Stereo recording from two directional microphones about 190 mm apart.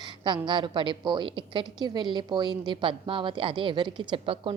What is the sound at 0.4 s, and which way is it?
A woman's voice, 25° right (ahead or behind).